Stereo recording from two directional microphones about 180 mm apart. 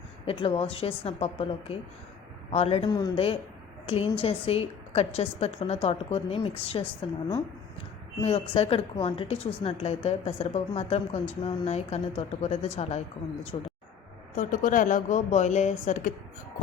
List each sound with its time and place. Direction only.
0.3 s a woman's voice: 30° left (ahead or behind)
8.2 s a woman's voice: 30° left (ahead or behind)
14.3 s speech: 50° left (ahead or behind)